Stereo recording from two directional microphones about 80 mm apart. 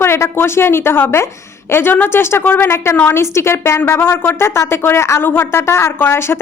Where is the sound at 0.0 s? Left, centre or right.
Left.